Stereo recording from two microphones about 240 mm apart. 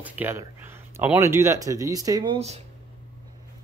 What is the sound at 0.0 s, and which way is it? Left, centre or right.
Speech, centre.